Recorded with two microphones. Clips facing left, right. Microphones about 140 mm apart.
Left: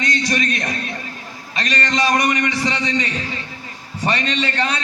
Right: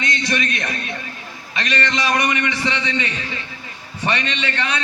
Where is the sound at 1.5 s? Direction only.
40° left (ahead or behind).